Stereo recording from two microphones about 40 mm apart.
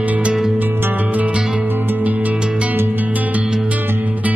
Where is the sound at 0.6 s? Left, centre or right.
Right.